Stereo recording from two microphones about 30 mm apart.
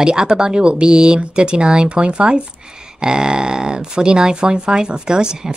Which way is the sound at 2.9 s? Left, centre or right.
Right.